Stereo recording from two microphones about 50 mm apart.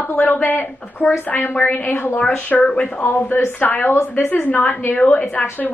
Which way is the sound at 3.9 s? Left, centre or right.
Left.